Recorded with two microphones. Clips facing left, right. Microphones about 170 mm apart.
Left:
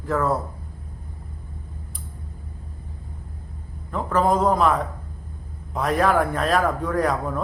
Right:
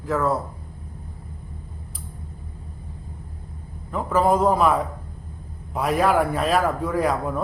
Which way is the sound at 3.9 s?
5° right (ahead or behind).